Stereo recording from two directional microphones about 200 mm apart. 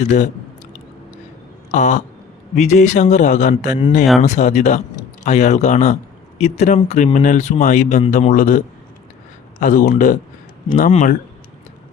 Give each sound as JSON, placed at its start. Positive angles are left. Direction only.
{"t": 1.7, "sound": "speech", "side_deg": 35}